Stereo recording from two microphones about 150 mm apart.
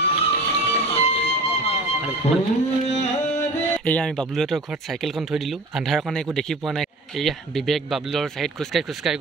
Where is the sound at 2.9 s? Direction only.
50° left (ahead or behind).